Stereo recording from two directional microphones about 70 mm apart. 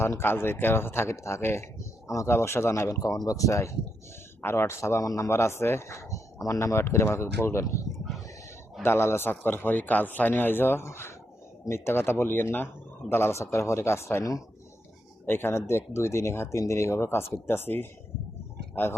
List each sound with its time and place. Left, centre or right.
0.0 s speech: left
4.4 s speech: left
6.7 s speech: left
7.9 s a sound: centre
8.8 s speech: left
15.3 s speech: left